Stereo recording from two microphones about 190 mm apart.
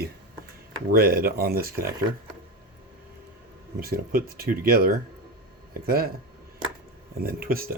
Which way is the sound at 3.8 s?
50° right (ahead or behind).